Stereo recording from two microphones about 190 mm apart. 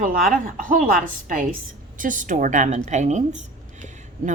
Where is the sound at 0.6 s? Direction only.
45° right (ahead or behind).